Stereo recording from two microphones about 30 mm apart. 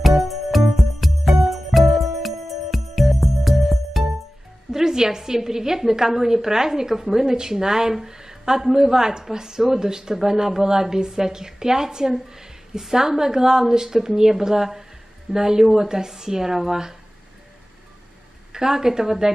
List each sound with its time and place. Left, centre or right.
0.1 s music: centre
4.7 s a woman's voice: centre
18.5 s a woman's voice: centre